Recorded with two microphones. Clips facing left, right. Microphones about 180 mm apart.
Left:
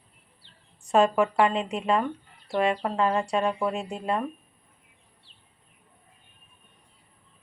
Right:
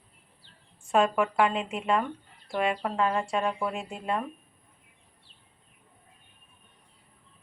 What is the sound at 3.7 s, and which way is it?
Speech, 40° left (ahead or behind).